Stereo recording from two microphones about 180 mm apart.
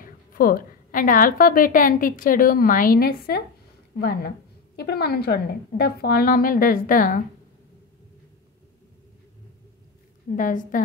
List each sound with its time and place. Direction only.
0.0 s a woman's voice: 55° left (ahead or behind)
10.3 s a woman's voice: 45° left (ahead or behind)